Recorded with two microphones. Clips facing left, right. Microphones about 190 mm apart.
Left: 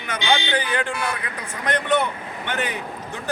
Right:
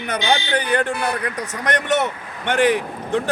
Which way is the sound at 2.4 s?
80° right.